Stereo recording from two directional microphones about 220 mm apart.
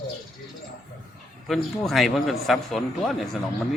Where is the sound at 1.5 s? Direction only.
Centre (ahead or behind).